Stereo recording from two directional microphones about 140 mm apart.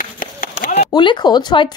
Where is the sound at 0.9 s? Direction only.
35° left (ahead or behind).